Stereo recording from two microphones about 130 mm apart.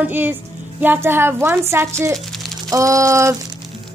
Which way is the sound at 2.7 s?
25° right (ahead or behind).